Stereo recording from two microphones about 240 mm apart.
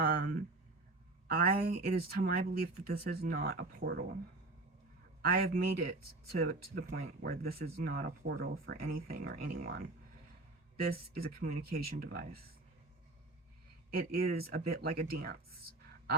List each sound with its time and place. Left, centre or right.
0.0 s a sound: right
1.3 s speech: right
5.2 s speech: right
13.9 s speech: right